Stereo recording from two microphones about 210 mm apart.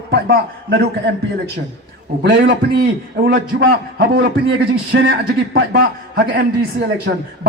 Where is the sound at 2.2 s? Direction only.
55° right (ahead or behind).